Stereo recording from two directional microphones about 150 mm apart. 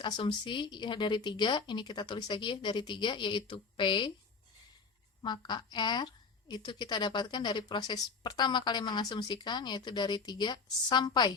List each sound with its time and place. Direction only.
0.0 s speech: 35° left (ahead or behind)
5.2 s a woman's voice: 30° left (ahead or behind)